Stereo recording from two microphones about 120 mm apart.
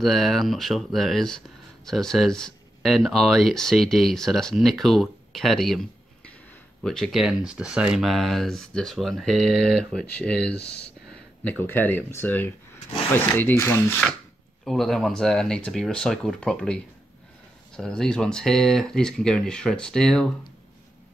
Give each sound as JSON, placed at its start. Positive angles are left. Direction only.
{"t": 0.0, "sound": "speech", "side_deg": 0}
{"t": 6.8, "sound": "speech", "side_deg": 5}
{"t": 14.6, "sound": "speech", "side_deg": 0}